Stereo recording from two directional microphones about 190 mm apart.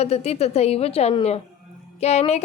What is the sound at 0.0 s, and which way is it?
A woman's voice, 35° left (ahead or behind).